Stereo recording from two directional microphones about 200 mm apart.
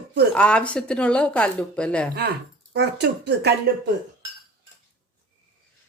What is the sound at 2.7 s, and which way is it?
Speech, 55° right (ahead or behind).